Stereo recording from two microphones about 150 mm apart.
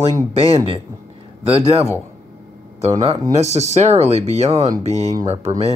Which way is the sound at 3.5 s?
50° right (ahead or behind).